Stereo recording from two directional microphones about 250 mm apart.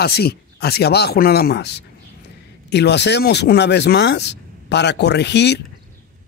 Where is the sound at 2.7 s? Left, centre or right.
Left.